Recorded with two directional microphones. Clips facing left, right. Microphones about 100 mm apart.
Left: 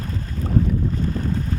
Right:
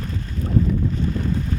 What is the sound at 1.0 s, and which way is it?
Boat, 45° left (ahead or behind).